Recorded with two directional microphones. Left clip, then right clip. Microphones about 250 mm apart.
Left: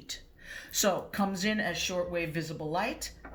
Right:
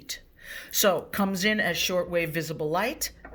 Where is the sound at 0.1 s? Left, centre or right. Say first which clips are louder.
Right 4 dB; right.